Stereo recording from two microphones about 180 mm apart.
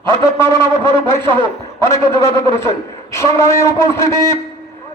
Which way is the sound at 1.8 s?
15° left (ahead or behind).